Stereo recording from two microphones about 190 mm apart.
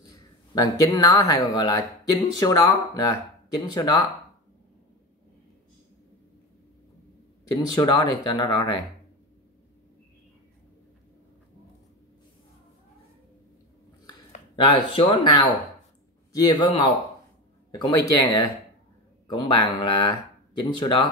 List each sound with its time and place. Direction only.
0.6 s speech: 20° left (ahead or behind)
7.5 s speech: 20° left (ahead or behind)
14.5 s speech: 25° left (ahead or behind)